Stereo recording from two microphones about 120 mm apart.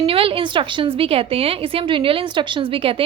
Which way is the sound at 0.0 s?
50° right (ahead or behind).